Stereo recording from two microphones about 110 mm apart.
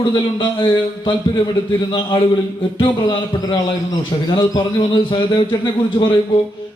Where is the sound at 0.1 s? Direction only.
45° left (ahead or behind).